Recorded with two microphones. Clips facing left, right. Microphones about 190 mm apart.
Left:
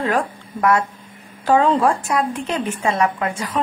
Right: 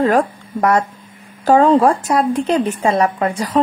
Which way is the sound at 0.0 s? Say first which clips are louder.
Right 6 dB; 40° right (ahead or behind).